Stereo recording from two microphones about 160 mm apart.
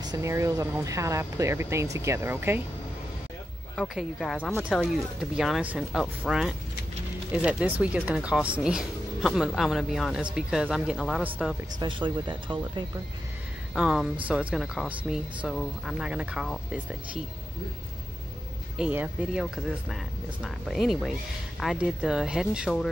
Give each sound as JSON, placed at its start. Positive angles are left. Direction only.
{"t": 0.0, "sound": "speech", "side_deg": -20}
{"t": 3.7, "sound": "speech", "side_deg": 0}
{"t": 7.8, "sound": "speech", "side_deg": -5}
{"t": 11.8, "sound": "speech", "side_deg": -30}
{"t": 13.7, "sound": "speech", "side_deg": -5}
{"t": 18.8, "sound": "speech", "side_deg": -10}